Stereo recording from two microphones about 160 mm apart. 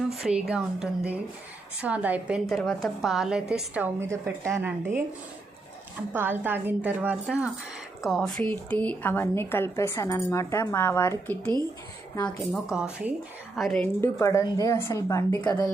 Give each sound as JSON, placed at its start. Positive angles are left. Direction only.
{"t": 0.1, "sound": "a woman's voice", "side_deg": -5}
{"t": 2.5, "sound": "a woman's voice", "side_deg": 0}
{"t": 6.1, "sound": "a woman's voice", "side_deg": -15}
{"t": 12.7, "sound": "a woman's voice", "side_deg": -5}
{"t": 14.0, "sound": "a woman's voice", "side_deg": 15}